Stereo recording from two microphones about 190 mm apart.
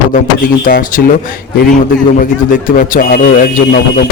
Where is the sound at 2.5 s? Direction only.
45° left (ahead or behind).